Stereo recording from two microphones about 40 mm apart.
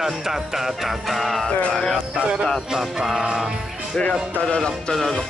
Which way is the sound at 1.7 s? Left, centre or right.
Centre.